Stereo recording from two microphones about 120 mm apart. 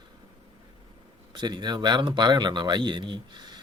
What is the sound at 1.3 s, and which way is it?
A man's voice, 40° right (ahead or behind).